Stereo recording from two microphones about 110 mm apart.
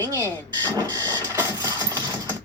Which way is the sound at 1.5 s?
35° right (ahead or behind).